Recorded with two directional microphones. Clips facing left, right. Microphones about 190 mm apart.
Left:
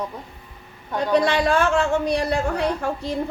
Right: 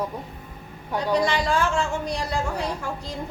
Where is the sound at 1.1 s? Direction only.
60° left (ahead or behind).